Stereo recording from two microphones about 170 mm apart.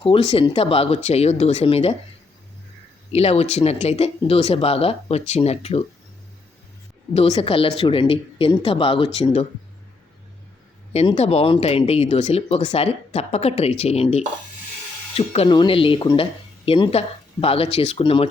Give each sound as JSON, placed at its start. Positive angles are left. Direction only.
{"t": 0.0, "sound": "speech", "side_deg": 35}
{"t": 3.1, "sound": "speech", "side_deg": 35}
{"t": 7.1, "sound": "speech", "side_deg": 35}
{"t": 10.9, "sound": "speech", "side_deg": 40}